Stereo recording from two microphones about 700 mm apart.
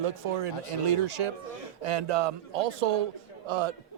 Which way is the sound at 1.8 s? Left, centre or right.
Right.